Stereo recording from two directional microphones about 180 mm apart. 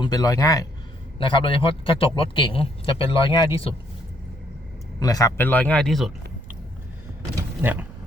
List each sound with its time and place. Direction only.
0.0 s a man's voice: 20° left (ahead or behind)
4.9 s speech: 20° left (ahead or behind); by 6.1 s centre (ahead or behind)
7.3 s a sound: 10° right (ahead or behind)